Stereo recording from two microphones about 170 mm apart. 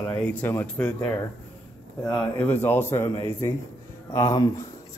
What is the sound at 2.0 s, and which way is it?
Speech, 10° left (ahead or behind).